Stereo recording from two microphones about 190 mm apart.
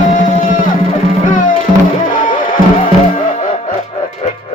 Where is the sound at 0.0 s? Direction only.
45° left (ahead or behind).